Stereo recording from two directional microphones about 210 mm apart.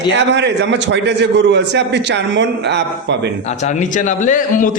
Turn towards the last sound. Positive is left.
turn(degrees=35)  # may be behind; listen again after turning